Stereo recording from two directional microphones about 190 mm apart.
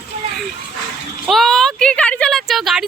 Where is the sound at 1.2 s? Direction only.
Centre (ahead or behind).